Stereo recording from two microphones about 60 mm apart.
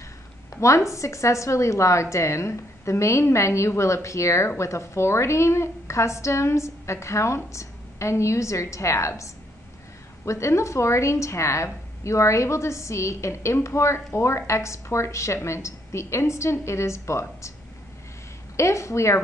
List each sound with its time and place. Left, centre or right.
0.6 s a woman's voice: left
18.6 s a woman's voice: left